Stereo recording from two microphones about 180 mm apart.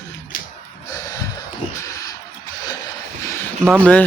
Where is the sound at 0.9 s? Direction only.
20° left (ahead or behind).